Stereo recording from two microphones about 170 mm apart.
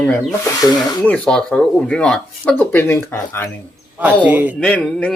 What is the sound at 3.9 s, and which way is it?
Speech, 10° right (ahead or behind).